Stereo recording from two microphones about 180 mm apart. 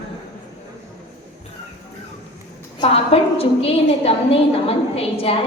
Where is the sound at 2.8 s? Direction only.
35° left (ahead or behind).